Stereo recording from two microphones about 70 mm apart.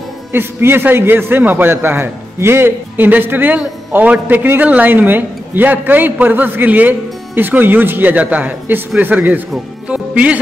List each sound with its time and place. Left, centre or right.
0.3 s a man's voice: right
9.8 s music: centre